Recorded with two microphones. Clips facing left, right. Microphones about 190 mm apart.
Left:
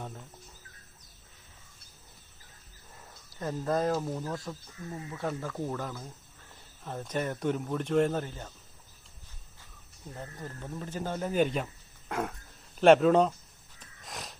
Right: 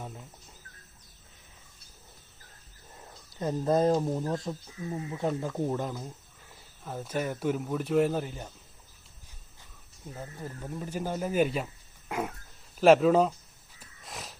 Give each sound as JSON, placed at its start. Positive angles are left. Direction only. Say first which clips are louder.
{"t": 3.3, "sound": "speech", "louder": "right 4 dB", "side_deg": -20}
{"t": 6.8, "sound": "speech", "louder": "right 1 dB", "side_deg": -5}
{"t": 10.1, "sound": "speech", "louder": "right 1 dB", "side_deg": -10}
{"t": 13.7, "sound": "a sound", "louder": "even", "side_deg": 0}